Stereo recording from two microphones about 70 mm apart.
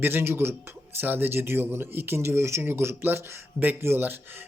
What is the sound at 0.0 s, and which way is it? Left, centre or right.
Speech, right.